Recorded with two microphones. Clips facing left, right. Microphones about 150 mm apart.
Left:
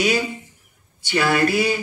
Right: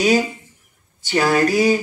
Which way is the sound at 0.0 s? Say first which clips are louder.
Right 4 dB; 40° right (ahead or behind).